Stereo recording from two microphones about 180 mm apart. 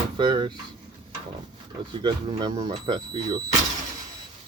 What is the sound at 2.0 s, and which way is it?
Speech, 25° right (ahead or behind).